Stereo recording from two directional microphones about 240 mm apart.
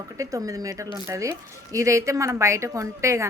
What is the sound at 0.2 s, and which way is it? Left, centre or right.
Speech, centre.